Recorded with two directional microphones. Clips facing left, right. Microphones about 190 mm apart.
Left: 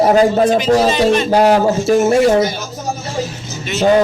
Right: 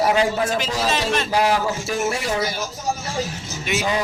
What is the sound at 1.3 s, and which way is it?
Speech, 60° left (ahead or behind).